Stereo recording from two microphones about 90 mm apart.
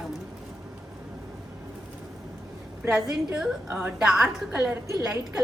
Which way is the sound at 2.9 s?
5° right (ahead or behind).